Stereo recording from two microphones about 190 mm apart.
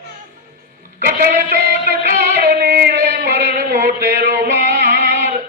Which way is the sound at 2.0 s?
50° right (ahead or behind).